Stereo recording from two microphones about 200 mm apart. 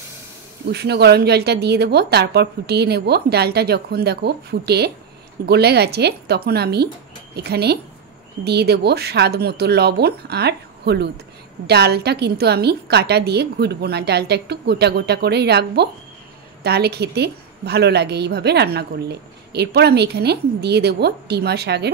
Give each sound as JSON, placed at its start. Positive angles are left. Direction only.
{"t": 0.7, "sound": "a woman's voice", "side_deg": -55}